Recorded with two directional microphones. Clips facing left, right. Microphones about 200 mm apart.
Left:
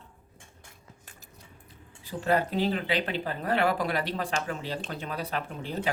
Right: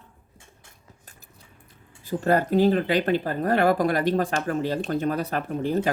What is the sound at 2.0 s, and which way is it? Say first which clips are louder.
Speech: right 4 dB; 45° right (ahead or behind).